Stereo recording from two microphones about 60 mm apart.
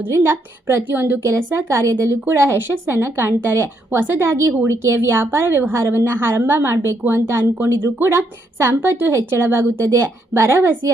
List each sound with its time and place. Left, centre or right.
0.1 s speech: right
0.9 s a woman's voice: right
1.2 s a woman's voice: right
8.8 s a woman's voice: right
9.8 s speech: right